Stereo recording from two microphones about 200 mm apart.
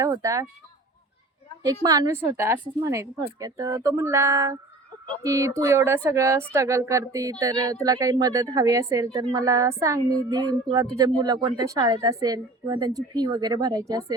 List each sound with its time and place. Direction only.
0.0 s speech: 15° right (ahead or behind)
1.6 s a woman's voice: 20° right (ahead or behind)